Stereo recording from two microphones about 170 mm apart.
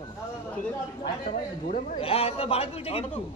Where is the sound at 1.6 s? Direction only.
45° left (ahead or behind).